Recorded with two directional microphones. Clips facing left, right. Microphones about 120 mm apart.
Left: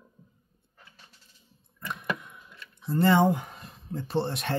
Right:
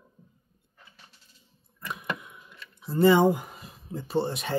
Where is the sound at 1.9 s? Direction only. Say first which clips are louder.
Left 1 dB; 5° right (ahead or behind).